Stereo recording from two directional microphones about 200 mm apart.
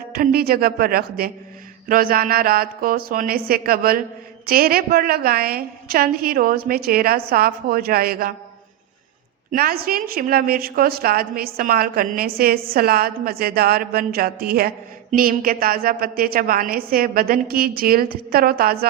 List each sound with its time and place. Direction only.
0.1 s a woman's voice: 45° right (ahead or behind)
9.5 s a woman's voice: 45° right (ahead or behind)